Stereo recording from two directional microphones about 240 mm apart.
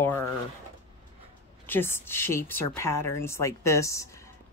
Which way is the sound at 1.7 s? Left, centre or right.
Centre.